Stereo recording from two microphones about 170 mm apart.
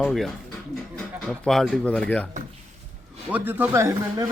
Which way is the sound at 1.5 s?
Centre (ahead or behind).